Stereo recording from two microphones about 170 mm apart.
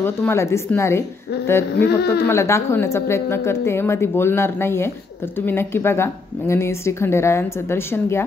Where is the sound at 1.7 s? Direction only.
70° left (ahead or behind).